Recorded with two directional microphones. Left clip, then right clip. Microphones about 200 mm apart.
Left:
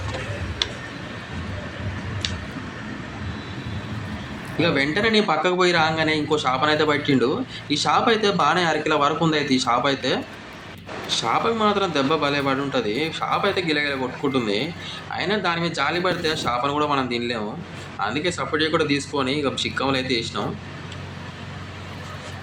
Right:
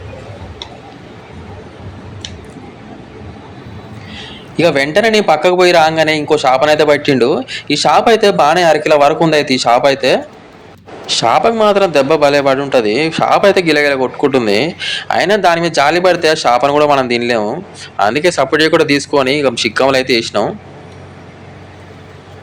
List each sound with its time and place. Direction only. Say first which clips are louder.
4.5 s a man's voice: right 10 dB; 40° right (ahead or behind)